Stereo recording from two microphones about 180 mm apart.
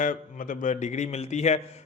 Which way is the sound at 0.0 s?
45° left (ahead or behind).